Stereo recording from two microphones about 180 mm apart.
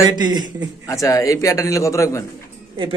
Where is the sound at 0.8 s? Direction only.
20° left (ahead or behind).